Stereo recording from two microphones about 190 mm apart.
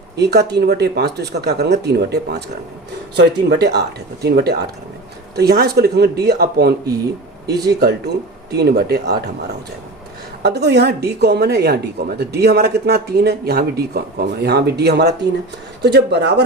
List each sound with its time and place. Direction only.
0.2 s speech: 60° right (ahead or behind)
10.4 s speech: 60° right (ahead or behind)